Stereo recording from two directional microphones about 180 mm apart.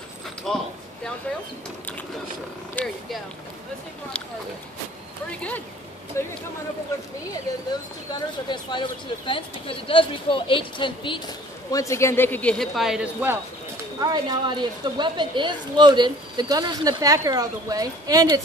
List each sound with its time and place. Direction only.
0.5 s speech: centre (ahead or behind)
2.7 s speech: 5° left (ahead or behind)
6.2 s speech: 15° left (ahead or behind)
8.1 s speech: 25° left (ahead or behind)
11.7 s speech: 15° left (ahead or behind); by 13.4 s 10° right (ahead or behind)
14.0 s a woman's voice: 25° right (ahead or behind)